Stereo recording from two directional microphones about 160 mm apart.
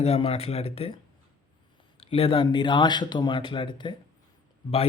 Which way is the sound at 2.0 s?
35° left (ahead or behind).